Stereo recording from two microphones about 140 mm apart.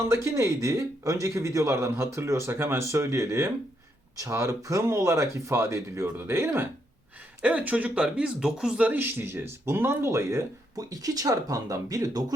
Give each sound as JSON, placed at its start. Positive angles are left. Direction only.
{"t": 0.0, "sound": "a man's voice", "side_deg": -20}